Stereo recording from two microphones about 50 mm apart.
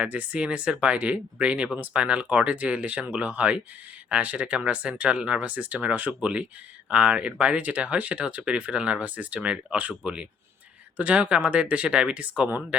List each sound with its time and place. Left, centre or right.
0.0 s speech: right